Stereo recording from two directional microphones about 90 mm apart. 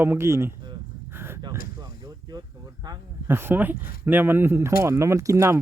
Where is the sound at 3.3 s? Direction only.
25° right (ahead or behind).